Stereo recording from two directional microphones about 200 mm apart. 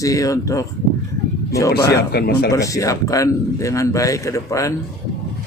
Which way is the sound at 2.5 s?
15° left (ahead or behind).